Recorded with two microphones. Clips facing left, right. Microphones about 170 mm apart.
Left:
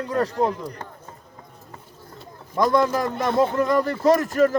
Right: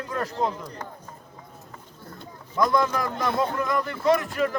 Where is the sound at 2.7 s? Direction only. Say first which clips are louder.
Left 4 dB; 30° left (ahead or behind).